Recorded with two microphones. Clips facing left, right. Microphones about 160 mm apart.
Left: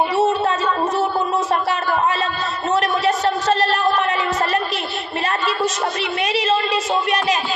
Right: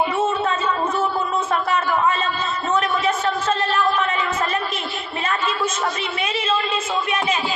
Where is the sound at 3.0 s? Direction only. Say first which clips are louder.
Left 3 dB; 35° left (ahead or behind).